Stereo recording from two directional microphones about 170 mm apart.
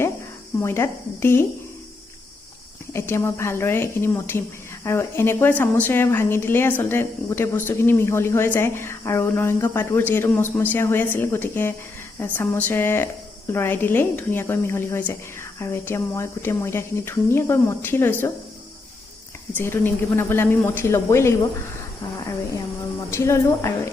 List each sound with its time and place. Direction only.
0.6 s speech: 15° left (ahead or behind)
2.9 s speech: 15° left (ahead or behind)
19.5 s speech: 15° left (ahead or behind)
23.1 s speech: 15° left (ahead or behind)